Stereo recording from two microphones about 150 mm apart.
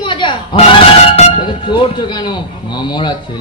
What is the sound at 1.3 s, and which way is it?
Speech, 30° left (ahead or behind).